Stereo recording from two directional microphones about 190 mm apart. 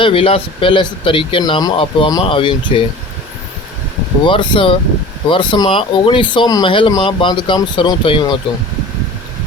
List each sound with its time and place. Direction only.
0.0 s speech: 30° left (ahead or behind)
4.3 s speech: 25° left (ahead or behind)